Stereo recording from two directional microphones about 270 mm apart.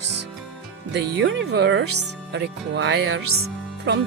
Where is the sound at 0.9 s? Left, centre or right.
Right.